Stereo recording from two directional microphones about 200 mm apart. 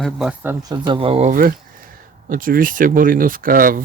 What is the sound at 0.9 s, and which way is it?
A man's voice, 30° right (ahead or behind).